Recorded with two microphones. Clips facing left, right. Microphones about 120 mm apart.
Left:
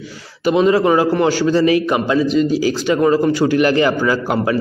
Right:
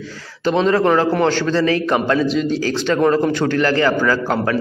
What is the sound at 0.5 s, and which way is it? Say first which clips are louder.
A man's voice: left 2 dB; 10° left (ahead or behind).